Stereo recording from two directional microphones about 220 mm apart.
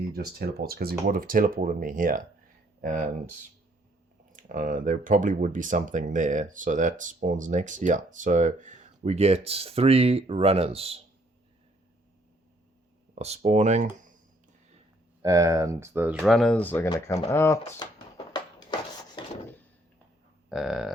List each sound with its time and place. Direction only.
0.1 s speech: 45° right (ahead or behind); by 11.0 s 25° right (ahead or behind)
13.1 s speech: 30° right (ahead or behind)
15.2 s speech: 15° right (ahead or behind); by 17.8 s 10° left (ahead or behind)
18.3 s a sound: 20° left (ahead or behind)
20.5 s speech: centre (ahead or behind)